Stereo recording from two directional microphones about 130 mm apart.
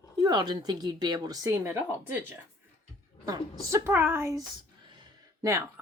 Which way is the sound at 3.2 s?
25° right (ahead or behind).